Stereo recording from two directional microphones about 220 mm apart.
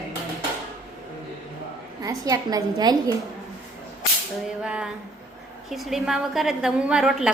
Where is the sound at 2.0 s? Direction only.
15° right (ahead or behind).